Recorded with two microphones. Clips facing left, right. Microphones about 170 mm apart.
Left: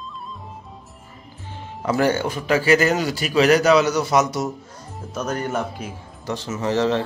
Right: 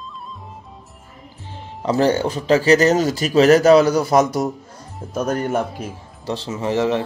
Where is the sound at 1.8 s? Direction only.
30° right (ahead or behind).